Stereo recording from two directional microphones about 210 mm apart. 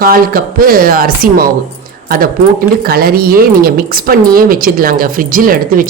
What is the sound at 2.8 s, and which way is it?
A woman's voice, 45° right (ahead or behind).